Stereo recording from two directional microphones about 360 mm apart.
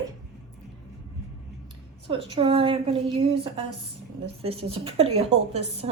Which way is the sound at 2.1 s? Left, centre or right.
Centre.